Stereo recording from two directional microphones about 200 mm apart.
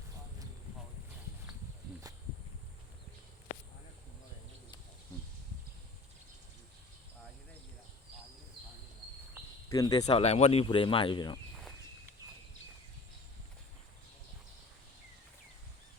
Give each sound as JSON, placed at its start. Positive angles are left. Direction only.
{"t": 9.6, "sound": "speech", "side_deg": 20}
{"t": 10.1, "sound": "speech", "side_deg": 30}